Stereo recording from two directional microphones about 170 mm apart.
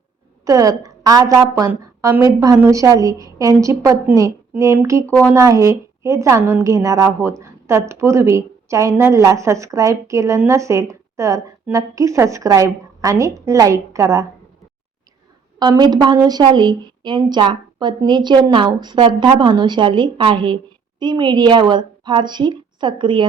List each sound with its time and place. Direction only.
0.4 s a woman's voice: 20° right (ahead or behind)
15.5 s a woman's voice: 25° right (ahead or behind)